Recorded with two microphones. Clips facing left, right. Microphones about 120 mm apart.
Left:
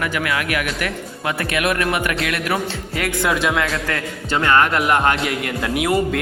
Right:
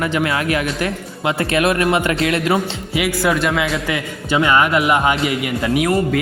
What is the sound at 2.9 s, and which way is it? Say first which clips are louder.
A man's voice: right 3 dB; 10° right (ahead or behind).